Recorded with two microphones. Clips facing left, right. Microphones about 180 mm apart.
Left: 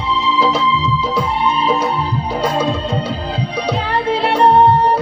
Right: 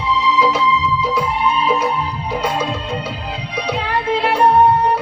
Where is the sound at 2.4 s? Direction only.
35° left (ahead or behind).